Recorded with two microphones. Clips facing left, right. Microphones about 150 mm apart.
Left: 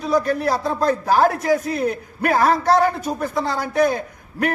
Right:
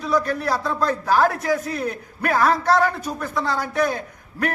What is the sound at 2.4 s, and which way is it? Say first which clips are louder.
Speech: left 2 dB; 40° left (ahead or behind).